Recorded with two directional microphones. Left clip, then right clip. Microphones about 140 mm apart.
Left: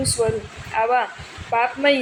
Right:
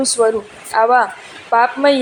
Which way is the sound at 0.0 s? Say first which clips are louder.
Right 7 dB; 35° right (ahead or behind).